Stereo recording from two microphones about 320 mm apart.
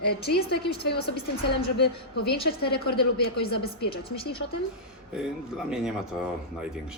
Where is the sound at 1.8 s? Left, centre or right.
Left.